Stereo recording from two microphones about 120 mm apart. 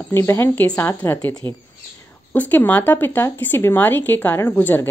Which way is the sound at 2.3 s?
15° left (ahead or behind).